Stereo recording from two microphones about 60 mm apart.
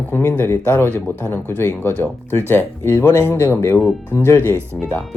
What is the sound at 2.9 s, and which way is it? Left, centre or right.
Speech, left.